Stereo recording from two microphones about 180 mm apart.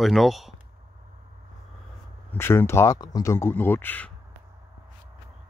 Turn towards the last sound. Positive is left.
turn(degrees=10)  # may be behind; listen again after turning